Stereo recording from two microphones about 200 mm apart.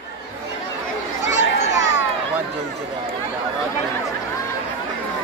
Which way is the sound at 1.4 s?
60° left (ahead or behind).